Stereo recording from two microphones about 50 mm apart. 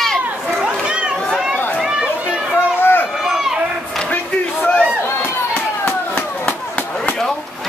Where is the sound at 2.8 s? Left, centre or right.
Left.